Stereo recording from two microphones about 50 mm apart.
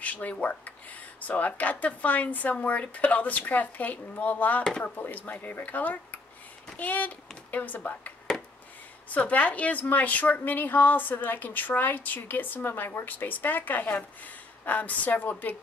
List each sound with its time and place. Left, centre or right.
0.0 s a woman's voice: left
8.3 s a sound: centre
9.1 s a woman's voice: left